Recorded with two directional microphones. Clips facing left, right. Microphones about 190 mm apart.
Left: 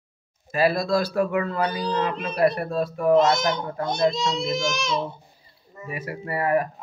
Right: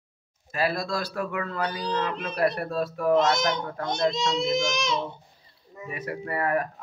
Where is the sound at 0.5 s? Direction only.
5° left (ahead or behind).